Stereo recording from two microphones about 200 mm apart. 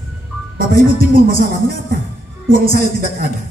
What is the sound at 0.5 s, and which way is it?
Speech, 45° right (ahead or behind).